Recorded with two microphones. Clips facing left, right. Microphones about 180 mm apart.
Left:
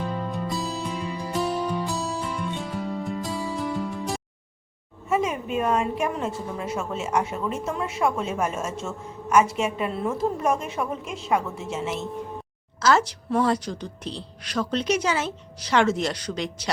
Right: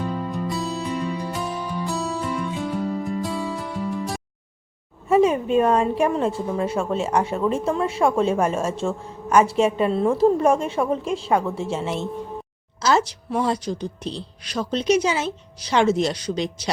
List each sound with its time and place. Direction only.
0.0 s music: centre (ahead or behind)
5.0 s a woman's voice: 30° right (ahead or behind)
12.8 s a woman's voice: 20° right (ahead or behind)
16.3 s speech: 25° right (ahead or behind)